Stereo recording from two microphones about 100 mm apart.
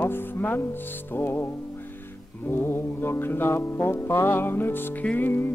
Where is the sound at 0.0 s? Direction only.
20° left (ahead or behind).